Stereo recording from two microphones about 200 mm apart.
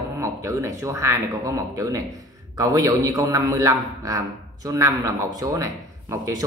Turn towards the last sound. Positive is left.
turn(degrees=-15)  # may be behind; listen again after turning